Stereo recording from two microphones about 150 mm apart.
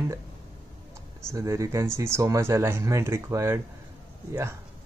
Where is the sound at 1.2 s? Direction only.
20° right (ahead or behind).